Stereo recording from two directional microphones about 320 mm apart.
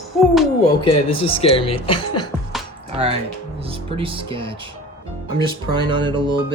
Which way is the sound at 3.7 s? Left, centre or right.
Centre.